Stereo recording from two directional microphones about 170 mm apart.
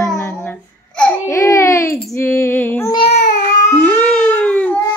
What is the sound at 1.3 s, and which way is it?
Baby cry, 15° left (ahead or behind).